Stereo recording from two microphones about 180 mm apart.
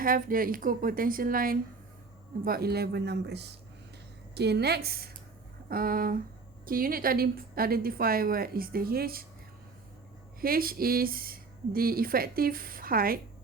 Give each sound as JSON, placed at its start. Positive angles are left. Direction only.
{"t": 0.0, "sound": "a woman's voice", "side_deg": -50}
{"t": 10.4, "sound": "speech", "side_deg": -55}